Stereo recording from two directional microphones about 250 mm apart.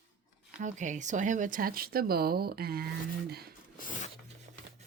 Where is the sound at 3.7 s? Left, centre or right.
Left.